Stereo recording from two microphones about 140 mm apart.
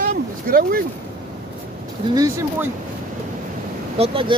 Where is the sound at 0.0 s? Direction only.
90° right.